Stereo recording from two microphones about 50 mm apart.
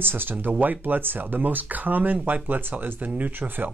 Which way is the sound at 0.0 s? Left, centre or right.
Right.